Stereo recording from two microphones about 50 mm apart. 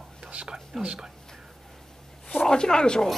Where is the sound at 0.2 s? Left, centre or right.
Right.